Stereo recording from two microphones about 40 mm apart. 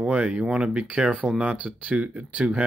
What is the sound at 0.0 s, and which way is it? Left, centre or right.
Speech, right.